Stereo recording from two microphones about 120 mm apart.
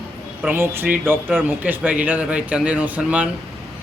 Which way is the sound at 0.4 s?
20° right (ahead or behind).